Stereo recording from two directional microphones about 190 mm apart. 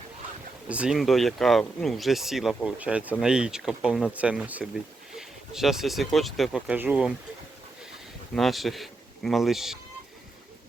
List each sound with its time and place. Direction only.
0.7 s speech: 5° right (ahead or behind)
8.4 s speech: centre (ahead or behind)